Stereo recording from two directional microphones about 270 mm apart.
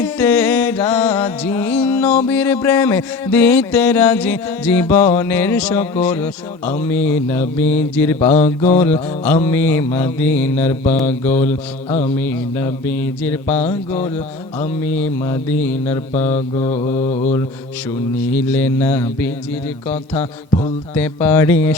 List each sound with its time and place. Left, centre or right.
0.0 s music: centre
6.7 s mantra: centre
11.9 s mantra: left
13.2 s mantra: centre
14.8 s mantra: centre
16.1 s mantra: left
18.3 s mantra: centre
20.9 s mantra: centre